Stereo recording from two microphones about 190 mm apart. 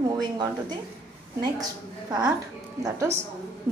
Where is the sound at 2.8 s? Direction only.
15° right (ahead or behind).